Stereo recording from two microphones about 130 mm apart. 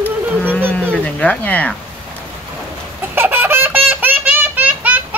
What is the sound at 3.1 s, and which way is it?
Baby laughter, 15° right (ahead or behind).